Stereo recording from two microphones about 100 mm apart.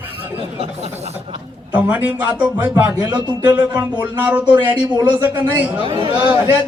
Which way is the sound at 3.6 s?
20° right (ahead or behind).